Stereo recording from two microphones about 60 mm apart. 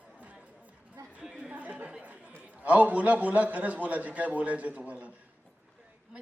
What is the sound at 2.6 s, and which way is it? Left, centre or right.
A man's voice, right.